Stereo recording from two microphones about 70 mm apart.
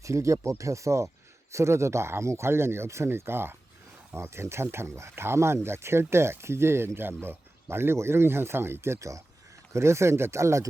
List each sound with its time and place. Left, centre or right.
0.0 s speech: right